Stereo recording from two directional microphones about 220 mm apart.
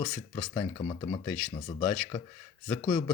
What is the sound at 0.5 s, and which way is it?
Speech, 20° left (ahead or behind).